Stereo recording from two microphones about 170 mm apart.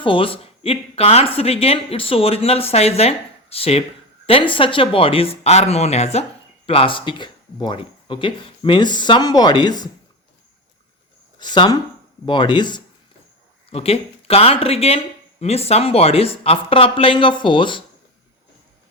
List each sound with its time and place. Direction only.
0.0 s speech: 30° left (ahead or behind)
11.3 s speech: 25° left (ahead or behind)